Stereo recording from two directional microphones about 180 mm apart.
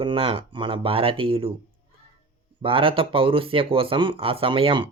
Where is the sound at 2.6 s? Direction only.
30° right (ahead or behind).